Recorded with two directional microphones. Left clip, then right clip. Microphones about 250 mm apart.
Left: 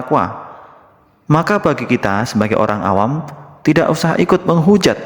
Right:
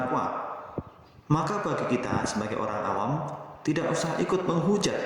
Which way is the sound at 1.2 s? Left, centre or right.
Left.